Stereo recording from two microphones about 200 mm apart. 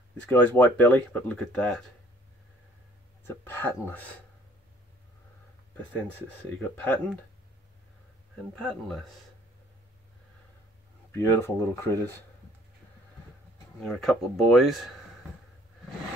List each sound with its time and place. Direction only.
0.3 s speech: 10° left (ahead or behind)
3.3 s speech: 10° left (ahead or behind)
6.2 s speech: 10° left (ahead or behind)
8.5 s speech: centre (ahead or behind)
11.1 s speech: 10° left (ahead or behind)
13.7 s speech: 5° left (ahead or behind)